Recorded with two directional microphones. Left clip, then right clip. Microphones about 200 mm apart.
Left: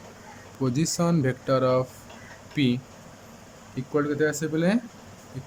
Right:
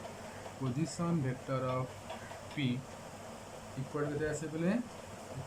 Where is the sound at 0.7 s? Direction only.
55° left (ahead or behind).